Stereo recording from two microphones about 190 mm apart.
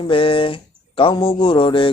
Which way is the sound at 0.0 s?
30° left (ahead or behind).